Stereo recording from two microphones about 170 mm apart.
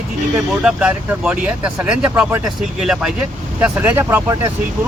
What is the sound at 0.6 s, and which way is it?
Speech, 10° right (ahead or behind).